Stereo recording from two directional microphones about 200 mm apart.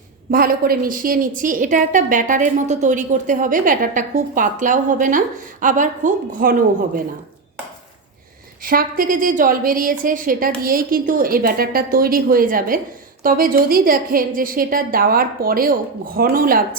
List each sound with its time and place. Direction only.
0.3 s a woman's voice: 45° right (ahead or behind)
8.6 s a woman's voice: 45° right (ahead or behind)